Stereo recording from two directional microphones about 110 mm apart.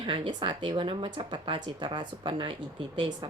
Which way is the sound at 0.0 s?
50° right (ahead or behind).